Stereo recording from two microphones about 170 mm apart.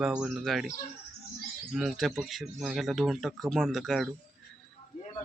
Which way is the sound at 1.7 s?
Centre (ahead or behind).